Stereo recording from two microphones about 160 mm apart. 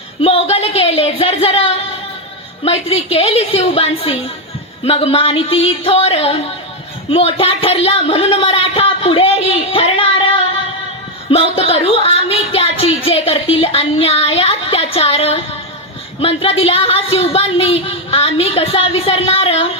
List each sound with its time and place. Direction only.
0.2 s speech: 35° left (ahead or behind)